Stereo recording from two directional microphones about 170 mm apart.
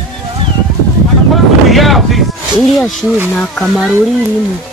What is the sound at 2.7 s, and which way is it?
Speech, centre (ahead or behind).